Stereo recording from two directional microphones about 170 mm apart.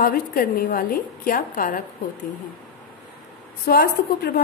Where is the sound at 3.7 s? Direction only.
65° left (ahead or behind).